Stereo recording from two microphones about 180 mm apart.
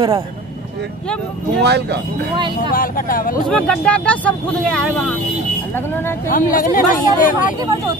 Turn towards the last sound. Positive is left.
turn(degrees=50)  # may be behind; listen again after turning